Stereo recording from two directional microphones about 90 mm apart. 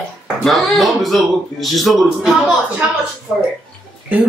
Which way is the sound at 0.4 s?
Centre (ahead or behind).